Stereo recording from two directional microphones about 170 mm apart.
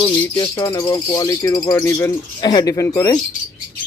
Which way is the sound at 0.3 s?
15° left (ahead or behind).